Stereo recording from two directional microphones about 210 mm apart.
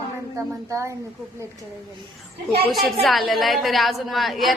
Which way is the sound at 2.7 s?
Centre (ahead or behind).